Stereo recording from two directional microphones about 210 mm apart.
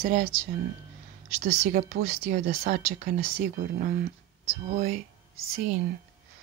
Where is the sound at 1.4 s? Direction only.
35° right (ahead or behind).